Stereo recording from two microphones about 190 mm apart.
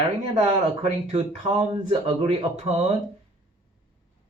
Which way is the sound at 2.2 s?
35° right (ahead or behind).